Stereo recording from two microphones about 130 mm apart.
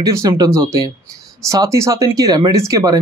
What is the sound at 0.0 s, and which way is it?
Speech, 25° right (ahead or behind).